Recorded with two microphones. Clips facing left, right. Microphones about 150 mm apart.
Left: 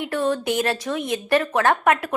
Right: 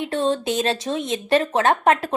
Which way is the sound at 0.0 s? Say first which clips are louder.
Right 1 dB; 25° right (ahead or behind).